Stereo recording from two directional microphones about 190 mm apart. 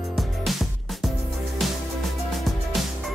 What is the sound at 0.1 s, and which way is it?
Music, centre (ahead or behind).